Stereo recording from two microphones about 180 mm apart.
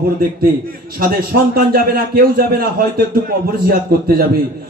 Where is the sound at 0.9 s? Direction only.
55° right (ahead or behind).